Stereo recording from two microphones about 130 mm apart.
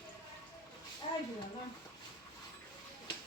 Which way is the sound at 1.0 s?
40° left (ahead or behind).